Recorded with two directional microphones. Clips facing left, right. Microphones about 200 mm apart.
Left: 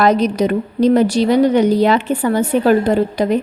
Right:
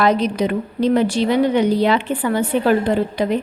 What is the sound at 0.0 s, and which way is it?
A woman's voice, 45° left (ahead or behind).